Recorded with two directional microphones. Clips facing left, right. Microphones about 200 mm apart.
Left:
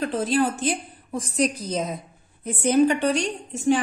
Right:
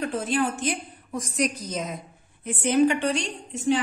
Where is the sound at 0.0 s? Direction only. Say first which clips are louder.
Left 3 dB; 35° left (ahead or behind).